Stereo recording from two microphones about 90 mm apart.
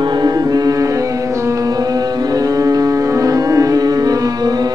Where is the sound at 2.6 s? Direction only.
40° right (ahead or behind).